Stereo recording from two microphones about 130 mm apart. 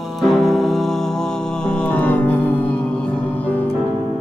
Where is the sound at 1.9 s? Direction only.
10° left (ahead or behind).